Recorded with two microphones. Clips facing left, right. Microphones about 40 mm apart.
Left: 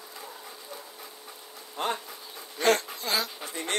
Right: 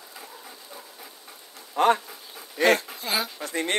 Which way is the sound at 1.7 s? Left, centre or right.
Right.